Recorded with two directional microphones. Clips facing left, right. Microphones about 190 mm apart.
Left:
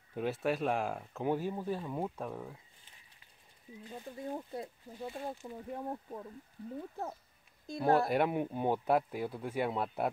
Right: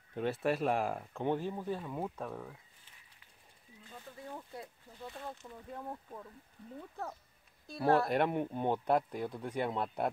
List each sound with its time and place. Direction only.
0.1 s speech: centre (ahead or behind)
3.9 s speech: 25° left (ahead or behind)
8.1 s speech: 5° left (ahead or behind)